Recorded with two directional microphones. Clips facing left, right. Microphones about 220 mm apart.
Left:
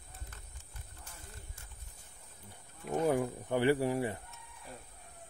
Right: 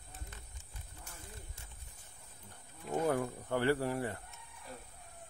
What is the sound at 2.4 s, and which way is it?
Wild animals, 15° left (ahead or behind).